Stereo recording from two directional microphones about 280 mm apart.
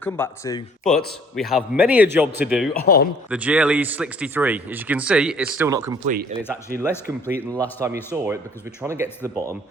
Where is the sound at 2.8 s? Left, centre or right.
Left.